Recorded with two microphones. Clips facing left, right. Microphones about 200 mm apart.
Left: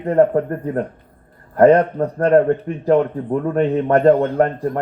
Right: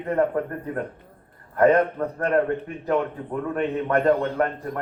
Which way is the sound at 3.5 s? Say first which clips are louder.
Left 7 dB; 40° left (ahead or behind).